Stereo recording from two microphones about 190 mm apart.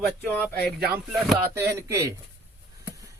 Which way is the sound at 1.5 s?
15° right (ahead or behind).